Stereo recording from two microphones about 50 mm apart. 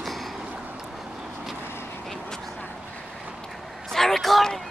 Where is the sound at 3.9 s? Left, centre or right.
Centre.